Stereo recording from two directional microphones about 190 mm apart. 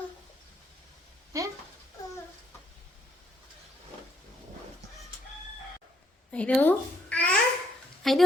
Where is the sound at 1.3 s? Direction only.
15° right (ahead or behind).